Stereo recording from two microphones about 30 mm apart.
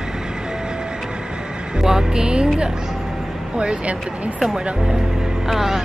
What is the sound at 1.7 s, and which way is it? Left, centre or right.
Music, right.